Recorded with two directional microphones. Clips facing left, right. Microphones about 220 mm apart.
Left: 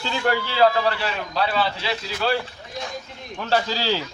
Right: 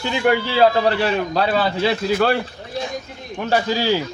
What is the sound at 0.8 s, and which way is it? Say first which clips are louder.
A man's voice: right 6 dB; 45° right (ahead or behind).